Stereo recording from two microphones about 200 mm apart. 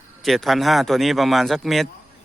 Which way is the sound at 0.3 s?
Centre (ahead or behind).